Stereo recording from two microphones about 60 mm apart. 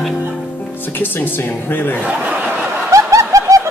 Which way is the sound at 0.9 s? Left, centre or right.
Left.